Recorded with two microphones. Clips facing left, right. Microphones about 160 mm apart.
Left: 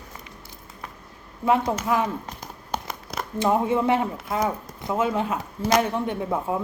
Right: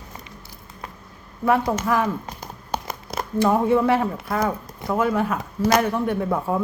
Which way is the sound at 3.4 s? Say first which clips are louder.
Right 3 dB; 20° left (ahead or behind).